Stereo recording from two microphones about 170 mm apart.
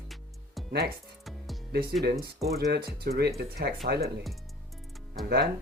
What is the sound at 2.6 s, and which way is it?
Speech, 70° right (ahead or behind).